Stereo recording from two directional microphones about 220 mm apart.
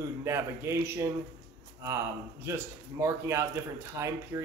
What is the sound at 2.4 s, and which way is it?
A man's voice, 10° right (ahead or behind).